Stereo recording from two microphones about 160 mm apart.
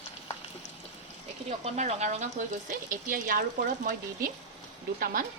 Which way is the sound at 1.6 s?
45° right (ahead or behind).